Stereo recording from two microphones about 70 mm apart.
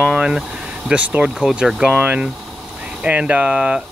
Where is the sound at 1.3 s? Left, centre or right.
Centre.